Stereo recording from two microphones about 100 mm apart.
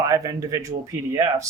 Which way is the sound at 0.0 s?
35° right (ahead or behind).